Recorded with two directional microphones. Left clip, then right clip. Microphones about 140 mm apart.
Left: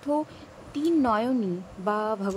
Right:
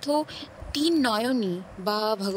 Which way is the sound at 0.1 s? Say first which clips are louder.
Right 2 dB; 90° right.